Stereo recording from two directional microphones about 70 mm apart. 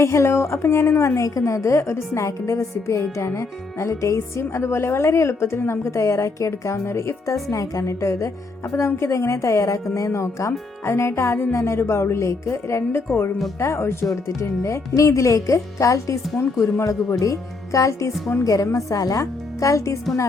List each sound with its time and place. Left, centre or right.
0.0 s a woman's voice: left